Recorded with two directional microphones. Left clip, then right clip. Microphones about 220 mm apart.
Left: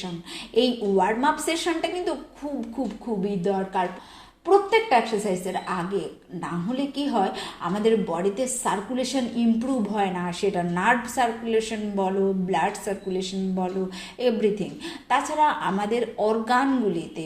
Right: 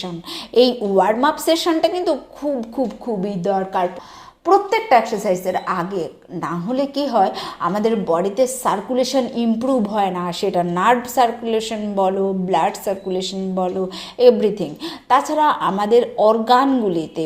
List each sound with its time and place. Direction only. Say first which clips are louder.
0.5 s a woman's voice: right 7 dB; 35° right (ahead or behind)
3.2 s a woman's voice: right 5 dB; 35° right (ahead or behind)